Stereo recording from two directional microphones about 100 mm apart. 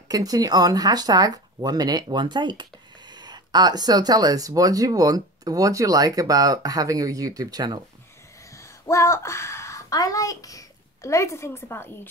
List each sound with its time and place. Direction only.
0.1 s speech: 40° right (ahead or behind)
8.5 s speech: 30° left (ahead or behind)